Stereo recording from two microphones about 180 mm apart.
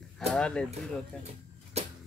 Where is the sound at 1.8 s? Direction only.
35° right (ahead or behind).